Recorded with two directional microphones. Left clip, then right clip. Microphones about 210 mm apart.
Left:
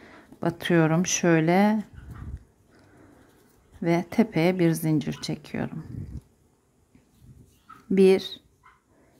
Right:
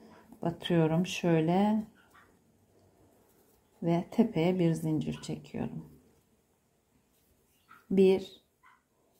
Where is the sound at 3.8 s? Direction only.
15° left (ahead or behind).